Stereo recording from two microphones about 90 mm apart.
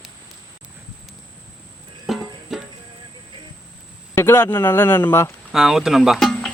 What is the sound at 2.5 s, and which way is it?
Music, 5° right (ahead or behind).